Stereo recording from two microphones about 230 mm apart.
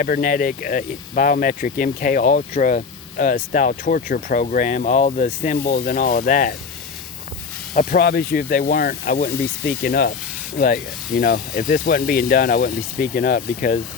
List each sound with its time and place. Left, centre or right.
0.0 s speech: left
7.7 s speech: left